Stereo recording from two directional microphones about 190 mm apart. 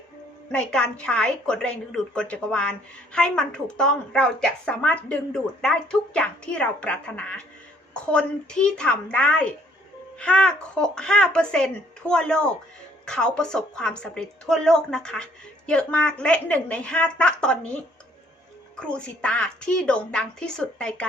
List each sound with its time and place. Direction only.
0.5 s a woman's voice: 5° left (ahead or behind)
18.8 s a woman's voice: 5° left (ahead or behind)